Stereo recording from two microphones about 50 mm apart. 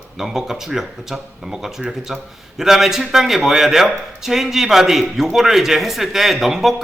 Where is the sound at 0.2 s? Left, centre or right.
Centre.